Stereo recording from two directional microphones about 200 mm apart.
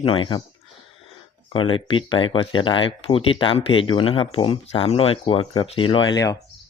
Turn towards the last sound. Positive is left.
turn(degrees=20)  # may be behind; listen again after turning